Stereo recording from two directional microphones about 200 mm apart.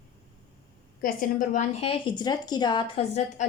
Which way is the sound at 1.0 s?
40° left (ahead or behind).